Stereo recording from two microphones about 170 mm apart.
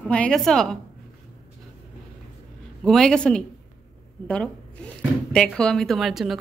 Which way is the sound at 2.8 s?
5° left (ahead or behind).